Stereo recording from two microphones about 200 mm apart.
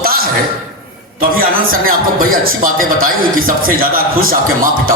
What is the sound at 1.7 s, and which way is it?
Speech, 45° right (ahead or behind).